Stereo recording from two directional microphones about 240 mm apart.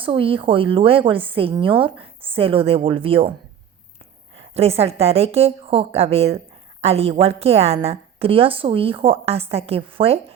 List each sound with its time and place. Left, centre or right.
0.0 s a woman's voice: right
4.4 s a woman's voice: right